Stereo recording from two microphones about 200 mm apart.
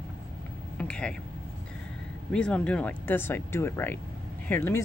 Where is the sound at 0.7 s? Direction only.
5° left (ahead or behind).